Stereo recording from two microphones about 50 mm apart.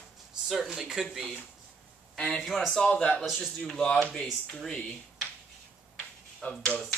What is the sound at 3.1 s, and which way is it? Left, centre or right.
Speech, centre.